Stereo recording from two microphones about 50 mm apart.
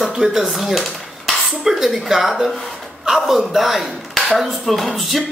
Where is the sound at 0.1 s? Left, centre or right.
Centre.